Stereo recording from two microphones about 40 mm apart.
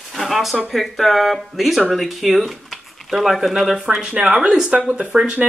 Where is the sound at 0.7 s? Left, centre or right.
Centre.